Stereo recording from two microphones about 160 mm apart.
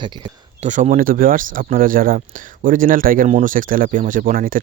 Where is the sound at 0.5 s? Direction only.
50° right (ahead or behind).